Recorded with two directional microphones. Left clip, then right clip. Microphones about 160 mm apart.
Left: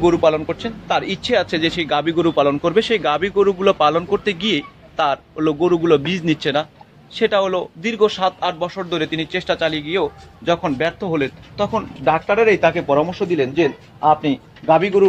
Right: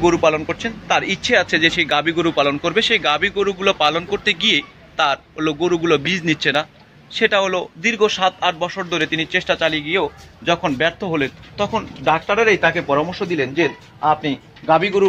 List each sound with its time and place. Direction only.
0.0 s a man's voice: 5° left (ahead or behind)